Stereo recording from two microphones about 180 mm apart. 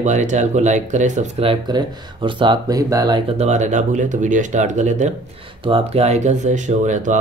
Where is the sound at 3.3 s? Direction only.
40° right (ahead or behind).